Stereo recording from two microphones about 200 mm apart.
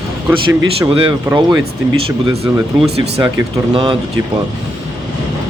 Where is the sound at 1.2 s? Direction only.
20° right (ahead or behind).